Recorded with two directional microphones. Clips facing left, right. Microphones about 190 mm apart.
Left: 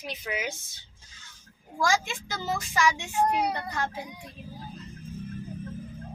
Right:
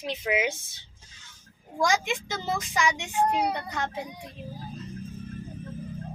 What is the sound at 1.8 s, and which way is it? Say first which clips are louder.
A child's voice: right 2 dB; 20° right (ahead or behind).